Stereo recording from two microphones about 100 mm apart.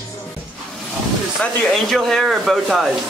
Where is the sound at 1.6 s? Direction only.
5° left (ahead or behind).